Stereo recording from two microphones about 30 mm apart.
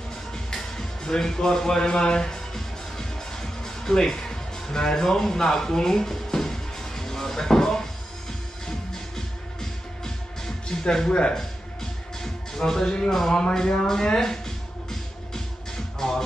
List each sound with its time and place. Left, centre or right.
0.3 s music: centre
2.3 s music: centre
11.1 s speech: left
12.2 s music: centre
13.3 s speech: left
14.0 s music: centre
16.0 s speech: centre